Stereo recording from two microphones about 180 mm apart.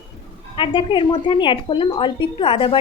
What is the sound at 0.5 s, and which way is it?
A woman's voice, 30° left (ahead or behind).